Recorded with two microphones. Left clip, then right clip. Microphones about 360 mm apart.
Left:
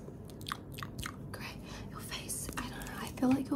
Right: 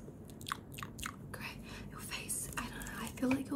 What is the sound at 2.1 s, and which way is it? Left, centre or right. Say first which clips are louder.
Whispering: left 1 dB; centre.